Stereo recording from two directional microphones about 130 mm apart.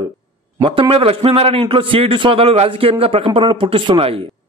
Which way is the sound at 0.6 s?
40° right (ahead or behind).